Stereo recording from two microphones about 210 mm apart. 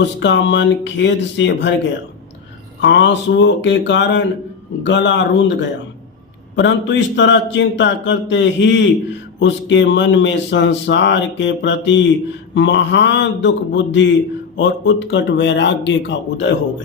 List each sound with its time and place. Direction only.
0.0 s speech: 55° left (ahead or behind)
2.8 s speech: 60° left (ahead or behind)